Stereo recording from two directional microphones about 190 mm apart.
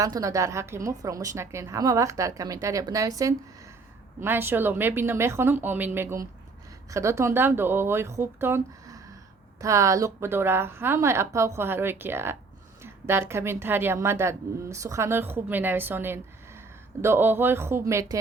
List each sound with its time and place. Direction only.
0.0 s a woman's voice: 15° right (ahead or behind)